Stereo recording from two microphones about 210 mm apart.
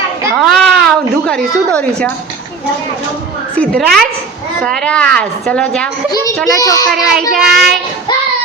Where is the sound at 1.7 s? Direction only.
5° left (ahead or behind).